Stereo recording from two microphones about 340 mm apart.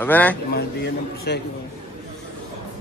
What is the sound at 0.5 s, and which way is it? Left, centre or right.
Speech, left.